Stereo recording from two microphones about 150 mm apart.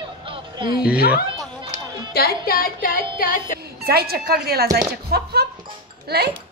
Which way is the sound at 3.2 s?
65° left (ahead or behind).